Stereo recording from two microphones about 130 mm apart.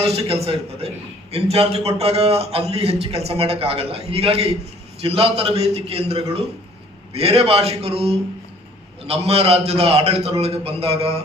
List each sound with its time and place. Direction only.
0.0 s a man's voice: 50° right (ahead or behind)